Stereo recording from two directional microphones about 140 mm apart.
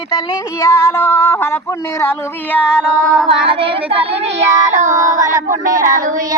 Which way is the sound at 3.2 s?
40° right (ahead or behind).